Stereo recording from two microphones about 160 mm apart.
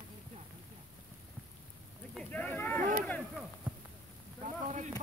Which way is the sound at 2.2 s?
10° left (ahead or behind).